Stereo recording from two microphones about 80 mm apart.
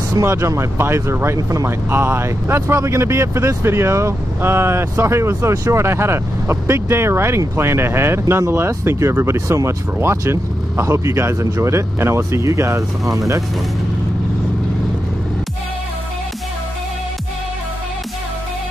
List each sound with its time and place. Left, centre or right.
0.2 s speech: right
1.9 s speech: right